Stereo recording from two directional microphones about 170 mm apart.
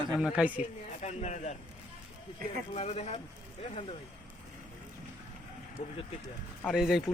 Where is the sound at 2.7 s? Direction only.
35° left (ahead or behind).